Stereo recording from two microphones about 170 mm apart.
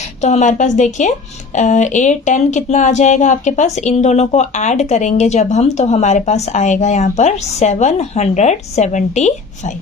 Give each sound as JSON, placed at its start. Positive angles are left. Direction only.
{"t": 0.2, "sound": "speech", "side_deg": 45}